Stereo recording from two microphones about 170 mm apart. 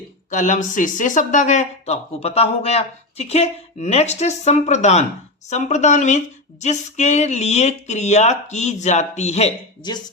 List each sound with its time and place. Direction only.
0.3 s a woman's voice: 45° left (ahead or behind)
9.8 s speech: 25° left (ahead or behind)